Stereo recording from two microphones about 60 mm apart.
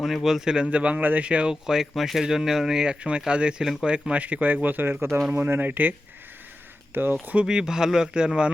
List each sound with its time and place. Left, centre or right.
0.0 s speech: centre
1.6 s speech: centre
3.6 s speech: centre
3.8 s speech: centre
6.9 s speech: right
7.4 s speech: centre